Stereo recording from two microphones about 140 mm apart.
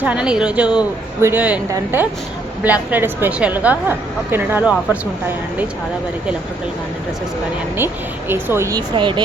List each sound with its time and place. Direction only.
0.0 s a woman's voice: 5° right (ahead or behind)
8.3 s speech: 15° right (ahead or behind)
9.0 s speech: 35° right (ahead or behind)